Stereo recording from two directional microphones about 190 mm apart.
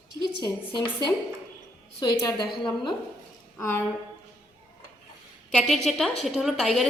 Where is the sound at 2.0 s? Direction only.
20° left (ahead or behind).